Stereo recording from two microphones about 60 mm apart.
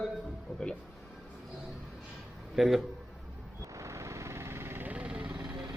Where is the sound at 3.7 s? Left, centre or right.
Right.